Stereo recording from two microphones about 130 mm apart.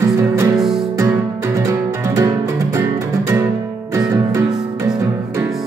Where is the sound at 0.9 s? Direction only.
25° right (ahead or behind).